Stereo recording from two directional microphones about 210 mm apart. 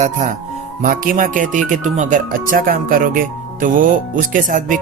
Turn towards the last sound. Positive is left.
turn(degrees=-40)  # may be behind; listen again after turning